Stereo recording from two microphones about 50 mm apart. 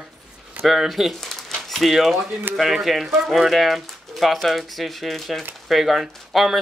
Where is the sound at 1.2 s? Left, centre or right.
Centre.